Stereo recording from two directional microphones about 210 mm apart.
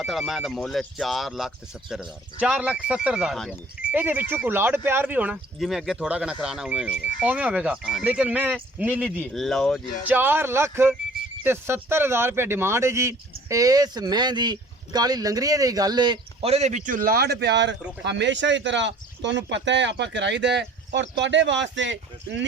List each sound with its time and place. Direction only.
0.0 s speech: centre (ahead or behind)
10.1 s speech: 10° right (ahead or behind); by 22.4 s 60° right (ahead or behind)